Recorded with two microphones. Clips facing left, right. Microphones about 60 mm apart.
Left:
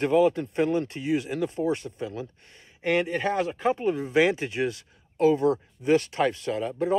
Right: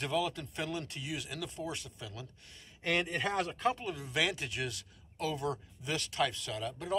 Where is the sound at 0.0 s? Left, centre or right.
Left.